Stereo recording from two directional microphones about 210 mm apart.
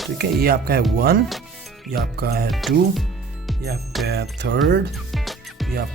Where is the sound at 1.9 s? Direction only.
50° right (ahead or behind).